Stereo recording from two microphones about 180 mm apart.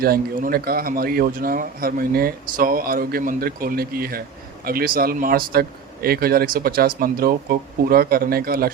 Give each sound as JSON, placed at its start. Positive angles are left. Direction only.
{"t": 0.0, "sound": "speech", "side_deg": -55}